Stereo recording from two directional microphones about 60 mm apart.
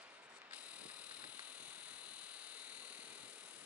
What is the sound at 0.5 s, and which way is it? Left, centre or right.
Vehicle, right.